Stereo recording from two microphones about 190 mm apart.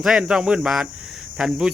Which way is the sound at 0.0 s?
5° right (ahead or behind).